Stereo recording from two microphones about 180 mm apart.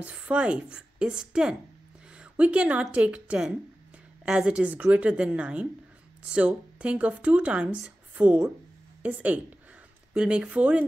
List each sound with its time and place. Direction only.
0.0 s speech: 5° right (ahead or behind)